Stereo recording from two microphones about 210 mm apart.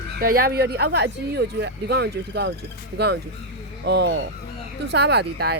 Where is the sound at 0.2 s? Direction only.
45° right (ahead or behind).